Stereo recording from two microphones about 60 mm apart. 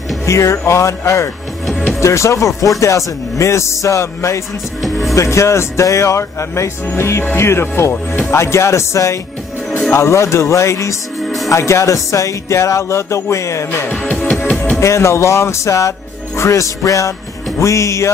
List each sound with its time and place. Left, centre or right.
0.2 s music: left
11.2 s music: centre
11.5 s music: left
13.7 s music: left
14.8 s music: left